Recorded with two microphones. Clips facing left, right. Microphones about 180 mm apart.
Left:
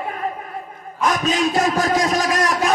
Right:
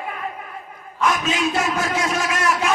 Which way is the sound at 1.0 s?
35° left (ahead or behind).